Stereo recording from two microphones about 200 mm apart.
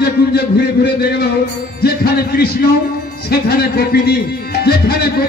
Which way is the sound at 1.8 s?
50° left (ahead or behind).